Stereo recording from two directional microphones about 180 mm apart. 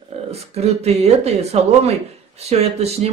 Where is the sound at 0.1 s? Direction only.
35° right (ahead or behind).